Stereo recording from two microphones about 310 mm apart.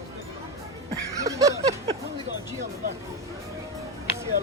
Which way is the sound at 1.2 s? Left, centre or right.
Centre.